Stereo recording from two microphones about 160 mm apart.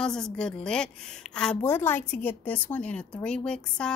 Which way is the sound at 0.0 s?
5° left (ahead or behind).